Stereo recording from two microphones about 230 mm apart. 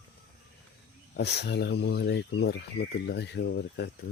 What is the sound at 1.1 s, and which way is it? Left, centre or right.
Speech, left.